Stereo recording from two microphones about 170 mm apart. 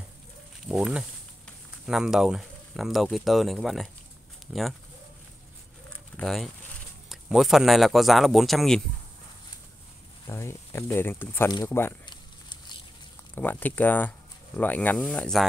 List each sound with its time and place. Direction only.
0.7 s speech: 5° right (ahead or behind)
6.1 s speech: centre (ahead or behind)
10.2 s speech: 15° left (ahead or behind)
12.1 s a sound: 25° left (ahead or behind)
13.3 s speech: 10° left (ahead or behind)